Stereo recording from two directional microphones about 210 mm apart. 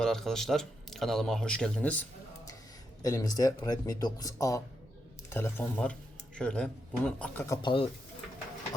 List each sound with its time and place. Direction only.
0.0 s speech: centre (ahead or behind); by 7.9 s 25° left (ahead or behind)